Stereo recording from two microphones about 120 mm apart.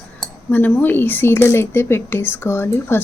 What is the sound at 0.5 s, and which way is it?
Speech, 15° left (ahead or behind).